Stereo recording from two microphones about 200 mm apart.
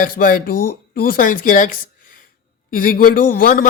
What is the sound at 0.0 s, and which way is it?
A woman's voice, 45° left (ahead or behind).